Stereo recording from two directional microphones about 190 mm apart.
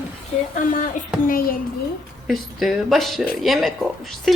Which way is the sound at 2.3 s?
Centre (ahead or behind).